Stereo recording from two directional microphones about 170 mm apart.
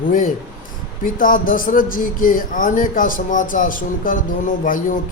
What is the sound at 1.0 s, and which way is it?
Speech, 50° left (ahead or behind).